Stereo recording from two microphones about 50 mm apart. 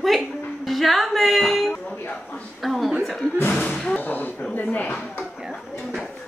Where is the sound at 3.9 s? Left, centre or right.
Left.